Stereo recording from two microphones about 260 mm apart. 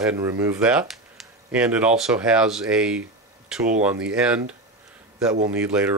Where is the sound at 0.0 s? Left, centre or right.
Centre.